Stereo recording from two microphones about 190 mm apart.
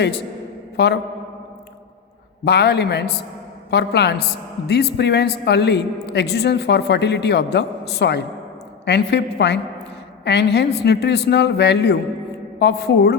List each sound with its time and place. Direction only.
0.8 s a man's voice: 60° left (ahead or behind)
2.4 s a man's voice: 60° left (ahead or behind)